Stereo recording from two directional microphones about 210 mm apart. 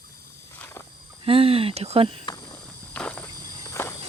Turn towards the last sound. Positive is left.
turn(degrees=5)  # may be behind; listen again after turning